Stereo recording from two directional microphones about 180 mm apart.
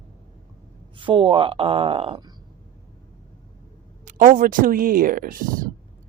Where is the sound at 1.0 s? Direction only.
30° right (ahead or behind).